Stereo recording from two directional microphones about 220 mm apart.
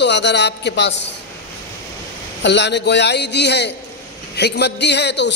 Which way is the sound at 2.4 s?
50° left (ahead or behind).